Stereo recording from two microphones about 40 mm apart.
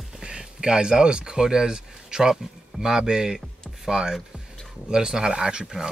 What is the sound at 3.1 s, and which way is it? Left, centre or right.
A man's voice, centre.